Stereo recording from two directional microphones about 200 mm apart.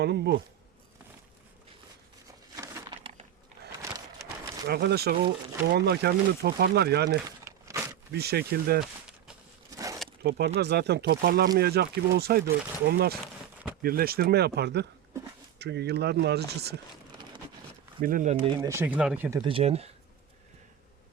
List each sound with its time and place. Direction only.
0.0 s speech: 55° right (ahead or behind)
2.6 s a sound: 15° right (ahead or behind)
3.0 s a sound: 30° right (ahead or behind)
4.6 s speech: 55° right (ahead or behind)
7.3 s crumpling: 15° right (ahead or behind)
8.1 s speech: 50° right (ahead or behind)
9.6 s bee: 15° right (ahead or behind)
10.2 s speech: 50° right (ahead or behind)
18.0 s speech: 40° right (ahead or behind)
18.7 s speech: 10° right (ahead or behind)
19.4 s speech: 25° right (ahead or behind)